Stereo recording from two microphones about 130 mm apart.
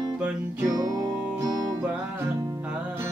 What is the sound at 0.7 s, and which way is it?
Music, 30° right (ahead or behind).